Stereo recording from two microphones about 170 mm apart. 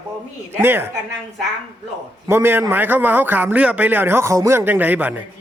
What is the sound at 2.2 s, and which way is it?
A man's voice, 15° right (ahead or behind).